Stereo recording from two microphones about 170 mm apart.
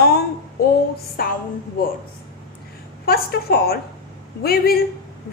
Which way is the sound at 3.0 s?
65° left (ahead or behind).